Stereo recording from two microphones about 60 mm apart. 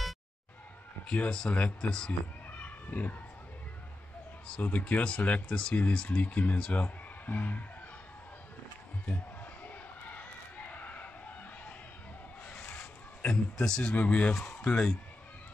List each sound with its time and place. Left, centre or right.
1.0 s speech: left
1.9 s speech: centre
2.5 s a sound: left
4.6 s speech: left
9.7 s a sound: left
12.4 s zipper: left
13.7 s speech: centre
13.9 s speech: left